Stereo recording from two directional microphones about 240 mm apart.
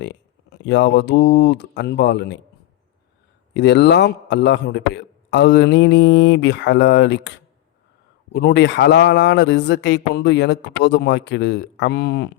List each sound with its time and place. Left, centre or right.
0.0 s a man's voice: left
3.5 s a man's voice: left